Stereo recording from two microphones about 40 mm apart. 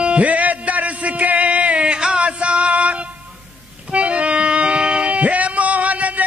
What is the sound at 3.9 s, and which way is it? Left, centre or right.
Music, right.